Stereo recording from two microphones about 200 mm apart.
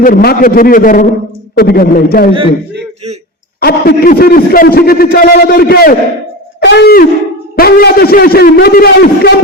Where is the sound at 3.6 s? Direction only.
50° left (ahead or behind).